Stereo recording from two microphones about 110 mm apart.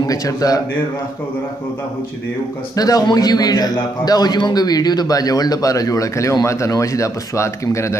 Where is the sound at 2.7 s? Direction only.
35° left (ahead or behind).